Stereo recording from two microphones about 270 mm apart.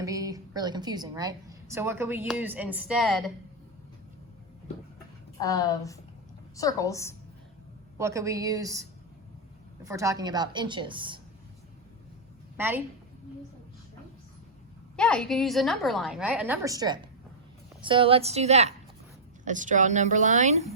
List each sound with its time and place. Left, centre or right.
0.0 s a woman's voice: centre
5.4 s a woman's voice: centre
7.9 s a woman's voice: centre
12.5 s a woman's voice: centre
14.9 s a woman's voice: centre; by 20.6 s right